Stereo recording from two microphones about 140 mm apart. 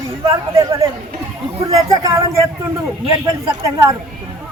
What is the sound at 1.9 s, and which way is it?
Speech, 25° right (ahead or behind).